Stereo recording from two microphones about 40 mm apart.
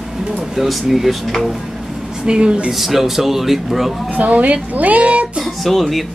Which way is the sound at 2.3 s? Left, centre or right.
Right.